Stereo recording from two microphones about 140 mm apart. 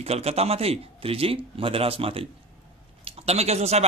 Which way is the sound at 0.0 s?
45° right (ahead or behind).